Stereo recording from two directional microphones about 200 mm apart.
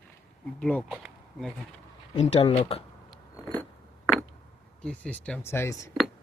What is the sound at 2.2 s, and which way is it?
Speech, 30° left (ahead or behind).